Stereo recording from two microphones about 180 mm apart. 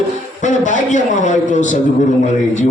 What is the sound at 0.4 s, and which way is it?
A man's voice, 45° left (ahead or behind).